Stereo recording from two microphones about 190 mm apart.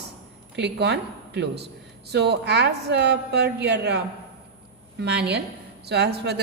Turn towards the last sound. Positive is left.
turn(degrees=-60)  # may be behind; listen again after turning